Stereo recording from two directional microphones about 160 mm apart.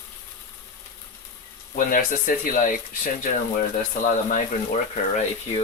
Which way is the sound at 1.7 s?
60° left (ahead or behind).